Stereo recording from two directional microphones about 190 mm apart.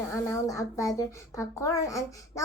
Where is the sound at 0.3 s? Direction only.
15° left (ahead or behind).